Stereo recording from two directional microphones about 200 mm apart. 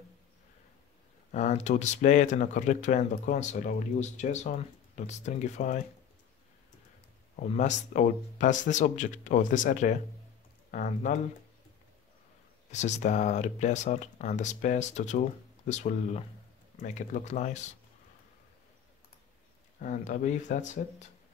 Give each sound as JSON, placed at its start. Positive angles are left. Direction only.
{"t": 1.3, "sound": "speech", "side_deg": 35}
{"t": 7.3, "sound": "speech", "side_deg": 35}
{"t": 12.7, "sound": "speech", "side_deg": 35}
{"t": 19.8, "sound": "speech", "side_deg": 40}